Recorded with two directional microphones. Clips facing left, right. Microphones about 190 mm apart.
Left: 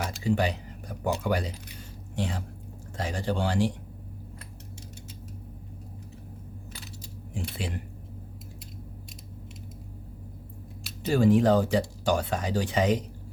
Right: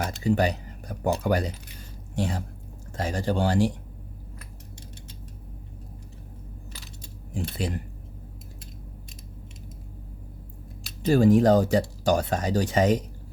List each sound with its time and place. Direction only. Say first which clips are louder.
0.0 s a sound: right 3 dB; 45° right (ahead or behind)
2.1 s speech: right 3 dB; 45° right (ahead or behind)
7.6 s speech: right 6 dB; 40° right (ahead or behind)
11.1 s speech: right 3 dB; 40° right (ahead or behind)